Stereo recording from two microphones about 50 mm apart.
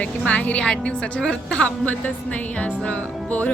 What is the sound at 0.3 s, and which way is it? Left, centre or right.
A woman's voice, left.